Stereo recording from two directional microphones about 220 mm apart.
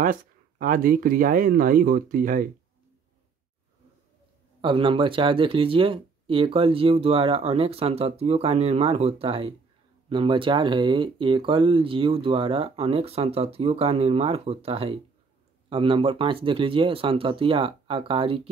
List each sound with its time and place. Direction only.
0.0 s speech: 40° right (ahead or behind)
4.6 s speech: 25° right (ahead or behind)